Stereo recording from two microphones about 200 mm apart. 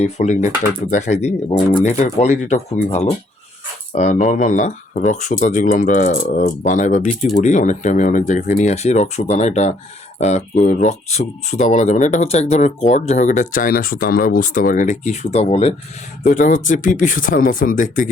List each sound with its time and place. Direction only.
0.0 s speech: 35° left (ahead or behind)